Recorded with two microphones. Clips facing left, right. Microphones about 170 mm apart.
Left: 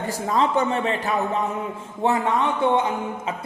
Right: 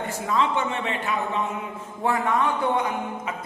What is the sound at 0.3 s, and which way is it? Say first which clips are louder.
Speech: left 3 dB; 40° left (ahead or behind).